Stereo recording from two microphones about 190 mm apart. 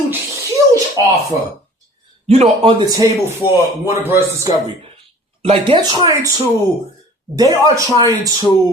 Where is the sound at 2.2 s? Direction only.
30° right (ahead or behind); by 4.5 s 15° right (ahead or behind).